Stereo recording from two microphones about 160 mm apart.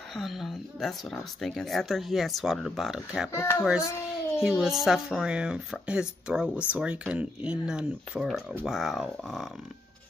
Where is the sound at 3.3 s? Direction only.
20° left (ahead or behind).